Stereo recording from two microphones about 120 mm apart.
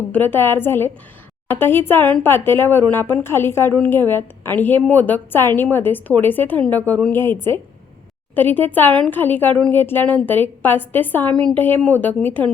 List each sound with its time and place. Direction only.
0.1 s a woman's voice: 15° left (ahead or behind)
8.4 s a woman's voice: 15° left (ahead or behind)